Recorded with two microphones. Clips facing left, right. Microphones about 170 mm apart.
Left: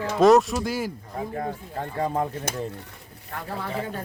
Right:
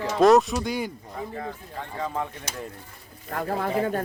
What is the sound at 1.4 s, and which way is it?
Speech, 45° left (ahead or behind).